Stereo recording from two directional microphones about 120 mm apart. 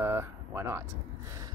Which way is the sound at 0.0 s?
20° right (ahead or behind).